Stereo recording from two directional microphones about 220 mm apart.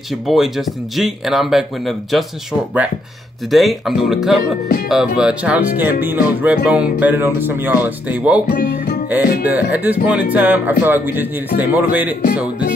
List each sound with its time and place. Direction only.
0.3 s speech: centre (ahead or behind)
3.5 s speech: centre (ahead or behind)
8.5 s speech: 40° left (ahead or behind)
9.1 s speech: 5° right (ahead or behind)